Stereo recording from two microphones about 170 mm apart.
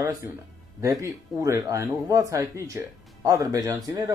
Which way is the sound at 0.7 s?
20° right (ahead or behind).